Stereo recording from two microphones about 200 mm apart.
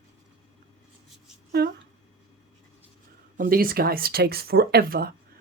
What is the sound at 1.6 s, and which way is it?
Speech, 55° right (ahead or behind).